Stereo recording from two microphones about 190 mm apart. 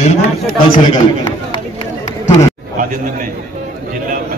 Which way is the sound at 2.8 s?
45° right (ahead or behind).